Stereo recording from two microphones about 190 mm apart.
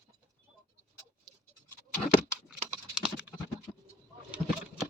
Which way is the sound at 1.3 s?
20° right (ahead or behind).